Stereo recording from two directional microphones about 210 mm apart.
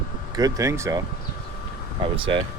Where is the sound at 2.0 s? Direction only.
25° right (ahead or behind).